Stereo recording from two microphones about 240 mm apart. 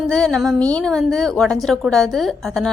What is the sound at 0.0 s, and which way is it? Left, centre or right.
A woman's voice, centre.